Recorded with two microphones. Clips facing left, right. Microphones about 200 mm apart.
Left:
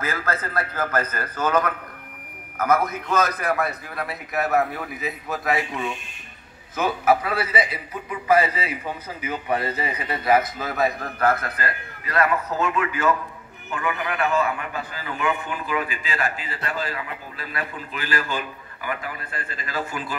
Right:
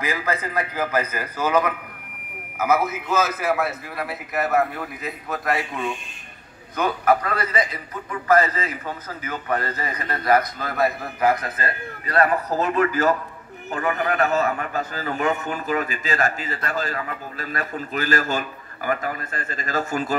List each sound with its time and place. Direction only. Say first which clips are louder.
0.0 s a man's voice: right 2 dB; 15° right (ahead or behind); by 20.2 s 45° right (ahead or behind)